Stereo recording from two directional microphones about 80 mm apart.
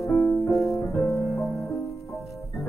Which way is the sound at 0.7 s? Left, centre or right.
Left.